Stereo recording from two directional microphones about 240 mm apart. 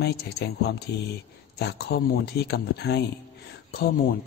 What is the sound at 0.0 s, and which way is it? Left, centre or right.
Speech, left.